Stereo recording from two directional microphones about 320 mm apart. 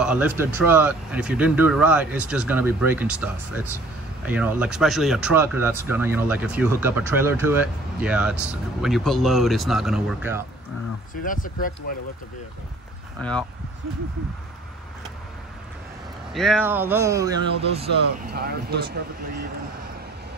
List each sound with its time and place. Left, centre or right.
0.0 s speech: centre
4.3 s speech: centre
11.2 s speech: left
13.2 s speech: centre
16.3 s speech: centre
18.3 s speech: right